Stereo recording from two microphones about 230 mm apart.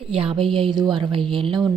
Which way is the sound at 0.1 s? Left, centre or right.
Right.